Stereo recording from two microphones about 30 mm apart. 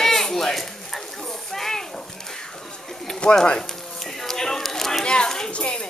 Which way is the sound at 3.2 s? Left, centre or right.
Left.